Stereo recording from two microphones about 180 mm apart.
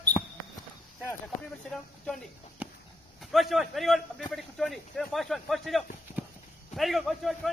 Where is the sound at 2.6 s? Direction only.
10° right (ahead or behind).